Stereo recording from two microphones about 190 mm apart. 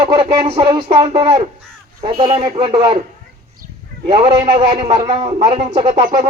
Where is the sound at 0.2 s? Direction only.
30° right (ahead or behind).